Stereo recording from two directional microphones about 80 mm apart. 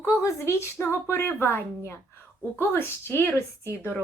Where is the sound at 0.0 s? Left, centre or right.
Left.